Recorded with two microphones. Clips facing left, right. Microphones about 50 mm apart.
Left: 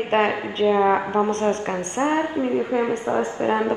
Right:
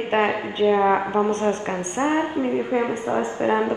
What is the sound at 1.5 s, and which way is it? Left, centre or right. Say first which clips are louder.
Speech: left 1 dB; centre.